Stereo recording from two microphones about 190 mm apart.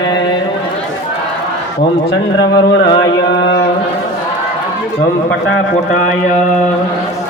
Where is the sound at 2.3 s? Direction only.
20° left (ahead or behind).